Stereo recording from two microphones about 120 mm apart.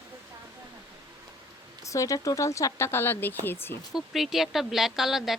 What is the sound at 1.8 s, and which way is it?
Speech, 25° left (ahead or behind).